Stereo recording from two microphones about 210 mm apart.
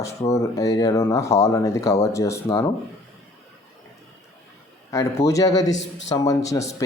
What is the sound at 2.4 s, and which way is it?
Speech, 25° left (ahead or behind).